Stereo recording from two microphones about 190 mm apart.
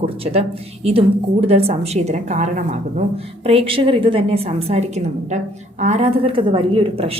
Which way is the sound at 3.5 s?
30° right (ahead or behind).